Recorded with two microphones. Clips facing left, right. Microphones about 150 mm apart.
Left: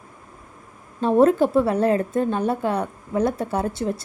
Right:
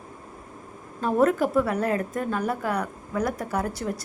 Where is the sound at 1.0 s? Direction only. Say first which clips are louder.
Left 5 dB; 25° left (ahead or behind).